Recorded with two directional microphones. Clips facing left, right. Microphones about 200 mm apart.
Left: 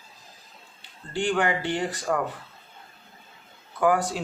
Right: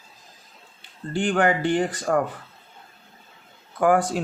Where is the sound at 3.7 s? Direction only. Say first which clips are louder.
Right 3 dB; 50° right (ahead or behind).